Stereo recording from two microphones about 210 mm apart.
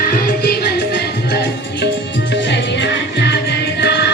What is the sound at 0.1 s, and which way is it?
Music, 45° left (ahead or behind).